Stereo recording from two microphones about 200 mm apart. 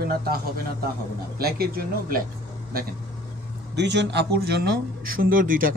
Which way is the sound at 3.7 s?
60° right (ahead or behind).